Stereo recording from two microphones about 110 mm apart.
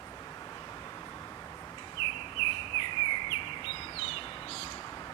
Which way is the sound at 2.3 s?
55° left (ahead or behind).